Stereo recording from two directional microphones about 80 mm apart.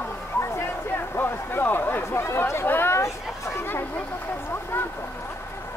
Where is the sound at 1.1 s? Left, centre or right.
Left.